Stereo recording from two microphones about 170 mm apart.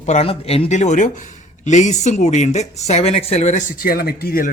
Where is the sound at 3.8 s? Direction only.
60° left (ahead or behind).